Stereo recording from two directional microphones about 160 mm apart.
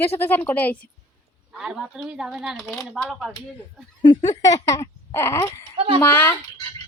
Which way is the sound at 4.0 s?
25° left (ahead or behind).